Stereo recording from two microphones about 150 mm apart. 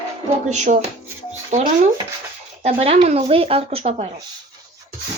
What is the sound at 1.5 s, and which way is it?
Speech, 50° right (ahead or behind).